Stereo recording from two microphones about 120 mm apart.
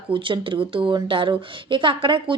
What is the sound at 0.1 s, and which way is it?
A woman's voice, 45° right (ahead or behind).